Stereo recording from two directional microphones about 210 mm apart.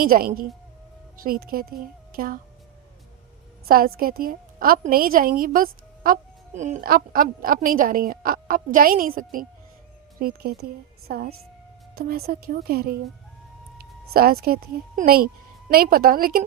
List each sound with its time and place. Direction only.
0.0 s a woman's voice: 45° right (ahead or behind)
3.7 s a woman's voice: 45° right (ahead or behind)
14.1 s a woman's voice: 45° right (ahead or behind)